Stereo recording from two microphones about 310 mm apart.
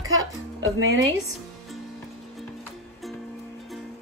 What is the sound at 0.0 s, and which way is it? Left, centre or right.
Music, right.